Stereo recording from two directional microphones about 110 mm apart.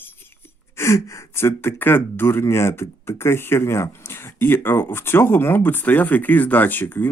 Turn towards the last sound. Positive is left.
turn(degrees=15)  # may be behind; listen again after turning